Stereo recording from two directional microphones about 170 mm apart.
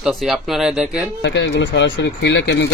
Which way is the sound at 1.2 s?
90° left.